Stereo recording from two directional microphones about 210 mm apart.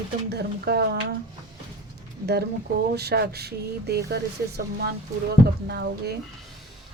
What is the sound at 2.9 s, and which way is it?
Speech, 50° right (ahead or behind).